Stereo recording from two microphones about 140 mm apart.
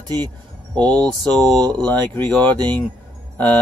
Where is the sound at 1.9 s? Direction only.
15° left (ahead or behind).